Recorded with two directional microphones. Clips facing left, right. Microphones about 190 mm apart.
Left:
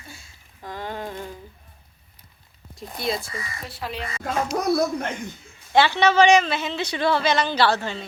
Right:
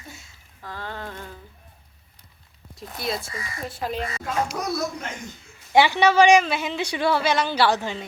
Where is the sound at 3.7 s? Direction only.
45° right (ahead or behind).